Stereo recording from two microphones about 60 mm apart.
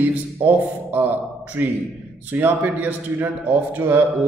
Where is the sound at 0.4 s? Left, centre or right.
Right.